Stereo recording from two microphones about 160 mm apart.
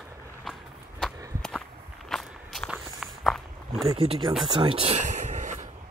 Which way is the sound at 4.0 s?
30° right (ahead or behind).